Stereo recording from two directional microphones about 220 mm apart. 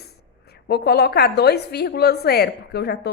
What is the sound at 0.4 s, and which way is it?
A woman's voice, 45° left (ahead or behind).